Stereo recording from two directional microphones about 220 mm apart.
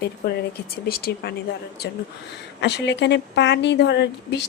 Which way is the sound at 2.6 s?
50° left (ahead or behind).